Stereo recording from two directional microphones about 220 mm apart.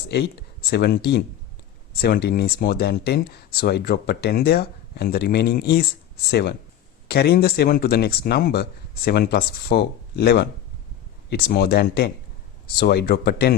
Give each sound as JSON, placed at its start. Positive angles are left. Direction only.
{"t": 0.1, "sound": "speech", "side_deg": 50}